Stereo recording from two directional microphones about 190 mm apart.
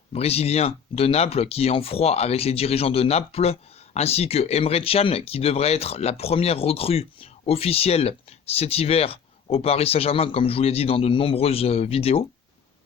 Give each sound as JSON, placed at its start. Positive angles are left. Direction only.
{"t": 0.1, "sound": "speech", "side_deg": 35}